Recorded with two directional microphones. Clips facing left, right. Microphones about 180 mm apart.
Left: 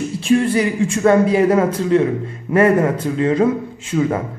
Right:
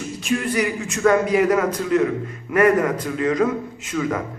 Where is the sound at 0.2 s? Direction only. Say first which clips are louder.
Left 6 dB; 30° left (ahead or behind).